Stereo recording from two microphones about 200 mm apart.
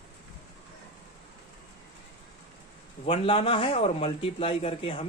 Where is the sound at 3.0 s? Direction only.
30° left (ahead or behind).